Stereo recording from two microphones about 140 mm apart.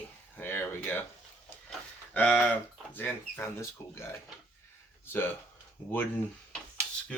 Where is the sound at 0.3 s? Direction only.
15° left (ahead or behind).